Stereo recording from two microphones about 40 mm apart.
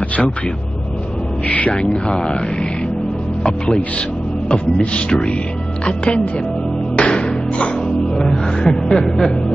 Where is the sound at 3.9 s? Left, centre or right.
Left.